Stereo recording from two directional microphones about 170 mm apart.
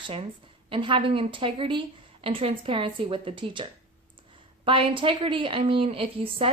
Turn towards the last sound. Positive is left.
turn(degrees=-35)  # may be behind; listen again after turning